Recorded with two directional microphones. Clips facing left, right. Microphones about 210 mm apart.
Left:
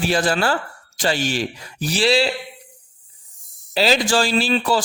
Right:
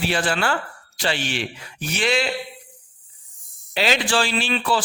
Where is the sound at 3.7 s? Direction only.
35° left (ahead or behind).